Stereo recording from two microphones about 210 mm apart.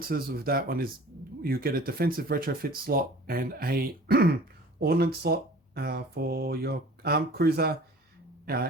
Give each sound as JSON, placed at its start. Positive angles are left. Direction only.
{"t": 0.0, "sound": "speech", "side_deg": -45}